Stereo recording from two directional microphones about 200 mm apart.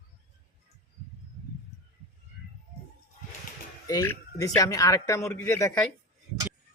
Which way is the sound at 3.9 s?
15° left (ahead or behind).